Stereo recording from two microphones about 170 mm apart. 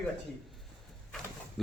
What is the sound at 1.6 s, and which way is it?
Speech, centre (ahead or behind).